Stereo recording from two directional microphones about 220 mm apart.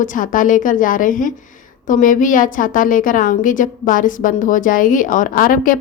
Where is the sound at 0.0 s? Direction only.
35° left (ahead or behind).